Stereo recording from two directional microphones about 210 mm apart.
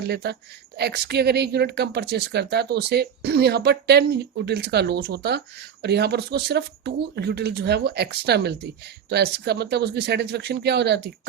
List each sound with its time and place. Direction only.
0.1 s speech: 50° right (ahead or behind)